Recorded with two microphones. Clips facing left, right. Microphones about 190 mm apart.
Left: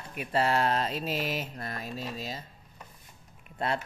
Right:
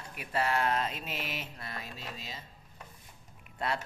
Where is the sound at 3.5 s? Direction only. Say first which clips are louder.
Left 3 dB; 25° left (ahead or behind).